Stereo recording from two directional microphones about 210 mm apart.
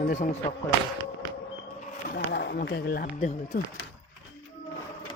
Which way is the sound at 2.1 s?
50° left (ahead or behind).